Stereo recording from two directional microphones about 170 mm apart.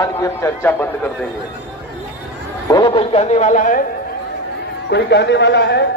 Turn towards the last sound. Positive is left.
turn(degrees=90)